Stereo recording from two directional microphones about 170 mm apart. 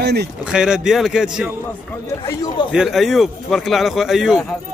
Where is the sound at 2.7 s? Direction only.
Centre (ahead or behind).